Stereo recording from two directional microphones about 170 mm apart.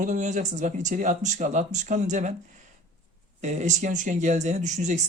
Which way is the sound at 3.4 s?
45° right (ahead or behind).